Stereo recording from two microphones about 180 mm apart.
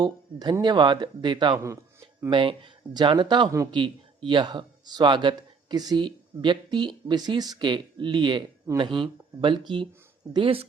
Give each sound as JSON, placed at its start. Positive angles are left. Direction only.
{"t": 0.0, "sound": "speech", "side_deg": -20}
{"t": 1.5, "sound": "a sound", "side_deg": -15}
{"t": 2.3, "sound": "speech", "side_deg": -30}